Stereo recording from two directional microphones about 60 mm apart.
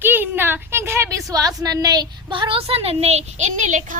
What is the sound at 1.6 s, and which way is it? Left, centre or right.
Speech, right.